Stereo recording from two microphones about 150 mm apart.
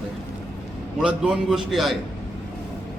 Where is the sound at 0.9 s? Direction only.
5° right (ahead or behind).